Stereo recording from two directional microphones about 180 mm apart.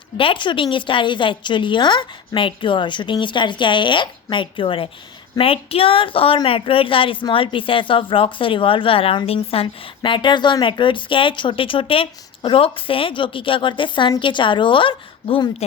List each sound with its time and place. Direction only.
0.2 s a woman's voice: 30° left (ahead or behind)